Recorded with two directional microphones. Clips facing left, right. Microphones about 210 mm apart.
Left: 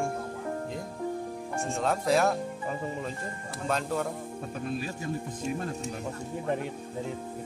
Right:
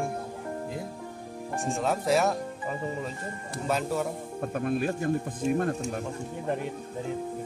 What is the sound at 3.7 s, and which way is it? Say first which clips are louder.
Speech: right 2 dB; 5° right (ahead or behind).